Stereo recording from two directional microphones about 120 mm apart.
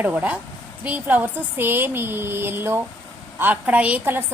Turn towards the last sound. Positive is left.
turn(degrees=-15)  # may be behind; listen again after turning